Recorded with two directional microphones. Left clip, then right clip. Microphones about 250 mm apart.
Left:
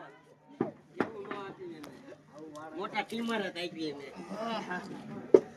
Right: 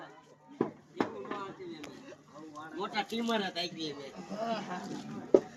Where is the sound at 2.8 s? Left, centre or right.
Centre.